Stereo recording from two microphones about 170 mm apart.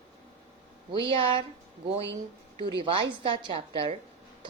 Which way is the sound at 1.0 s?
30° right (ahead or behind).